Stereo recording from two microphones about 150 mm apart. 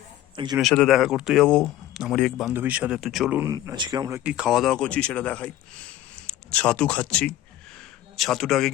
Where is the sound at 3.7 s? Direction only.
30° right (ahead or behind).